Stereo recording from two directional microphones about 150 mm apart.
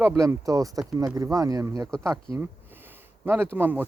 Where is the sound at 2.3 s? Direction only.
15° right (ahead or behind).